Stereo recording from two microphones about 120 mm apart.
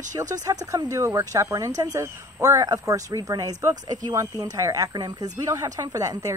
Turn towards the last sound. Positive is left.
turn(degrees=-30)  # may be behind; listen again after turning